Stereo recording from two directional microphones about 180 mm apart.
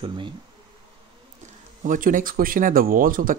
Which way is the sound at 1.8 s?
45° right (ahead or behind).